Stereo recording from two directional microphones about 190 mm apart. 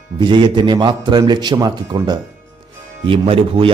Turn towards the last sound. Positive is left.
turn(degrees=-30)  # may be behind; listen again after turning